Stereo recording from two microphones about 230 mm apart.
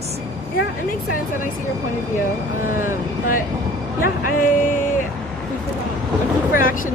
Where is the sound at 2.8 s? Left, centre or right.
Left.